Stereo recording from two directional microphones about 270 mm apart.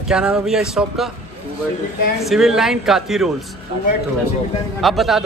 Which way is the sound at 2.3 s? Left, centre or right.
Centre.